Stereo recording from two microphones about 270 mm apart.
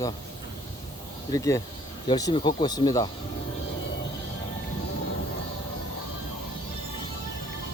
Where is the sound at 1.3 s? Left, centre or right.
Centre.